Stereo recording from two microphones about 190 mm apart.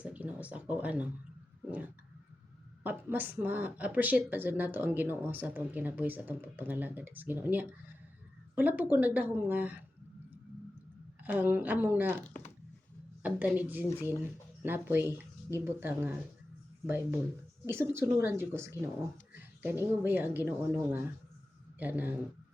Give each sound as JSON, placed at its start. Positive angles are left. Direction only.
{"t": 0.0, "sound": "a sound", "side_deg": -10}
{"t": 2.8, "sound": "speech", "side_deg": -10}
{"t": 11.2, "sound": "speech", "side_deg": -10}
{"t": 12.2, "sound": "speech", "side_deg": 5}
{"t": 13.2, "sound": "speech", "side_deg": -10}